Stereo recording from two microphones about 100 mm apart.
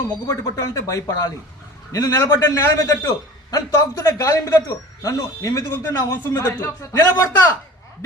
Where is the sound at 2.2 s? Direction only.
25° left (ahead or behind).